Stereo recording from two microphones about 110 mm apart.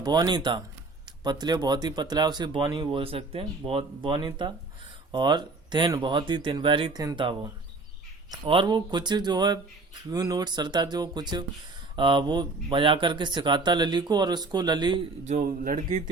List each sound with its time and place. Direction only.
0.0 s speech: 40° right (ahead or behind)
6.9 s speech: 35° right (ahead or behind)
8.4 s speech: 50° right (ahead or behind)
15.2 s a man's voice: 90° right